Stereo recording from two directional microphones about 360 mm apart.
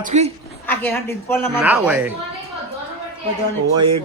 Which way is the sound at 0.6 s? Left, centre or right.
Centre.